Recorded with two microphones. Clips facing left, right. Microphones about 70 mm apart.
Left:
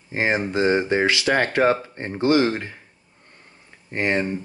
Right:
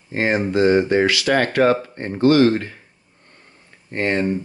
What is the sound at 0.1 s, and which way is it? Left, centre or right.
Speech, centre.